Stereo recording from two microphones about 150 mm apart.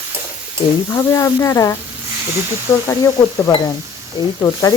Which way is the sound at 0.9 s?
20° left (ahead or behind).